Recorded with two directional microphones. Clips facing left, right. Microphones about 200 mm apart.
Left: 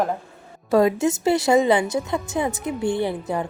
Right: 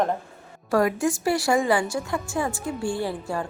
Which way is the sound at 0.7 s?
20° left (ahead or behind).